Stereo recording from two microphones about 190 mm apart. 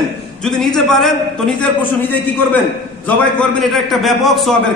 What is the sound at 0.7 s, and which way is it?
A man's voice, centre (ahead or behind).